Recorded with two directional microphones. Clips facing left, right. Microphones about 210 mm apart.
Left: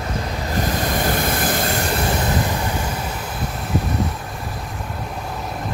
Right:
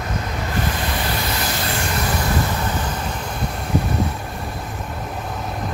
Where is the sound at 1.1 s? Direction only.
50° left (ahead or behind).